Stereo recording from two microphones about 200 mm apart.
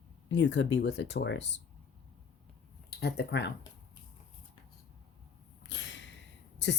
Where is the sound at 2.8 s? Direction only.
55° left (ahead or behind).